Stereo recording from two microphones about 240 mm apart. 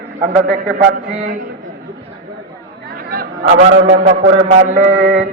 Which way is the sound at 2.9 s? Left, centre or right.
Right.